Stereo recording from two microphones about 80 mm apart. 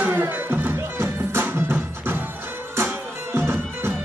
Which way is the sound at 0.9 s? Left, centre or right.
Right.